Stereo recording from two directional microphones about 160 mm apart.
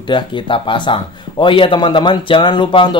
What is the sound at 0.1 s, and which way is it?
Speech, 30° left (ahead or behind).